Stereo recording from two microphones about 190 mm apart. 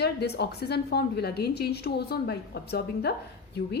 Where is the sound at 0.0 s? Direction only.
60° left (ahead or behind).